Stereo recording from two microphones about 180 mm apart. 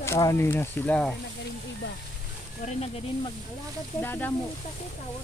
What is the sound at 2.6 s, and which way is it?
Speech, 40° left (ahead or behind).